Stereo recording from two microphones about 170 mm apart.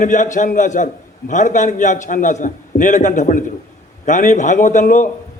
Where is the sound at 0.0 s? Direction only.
45° left (ahead or behind).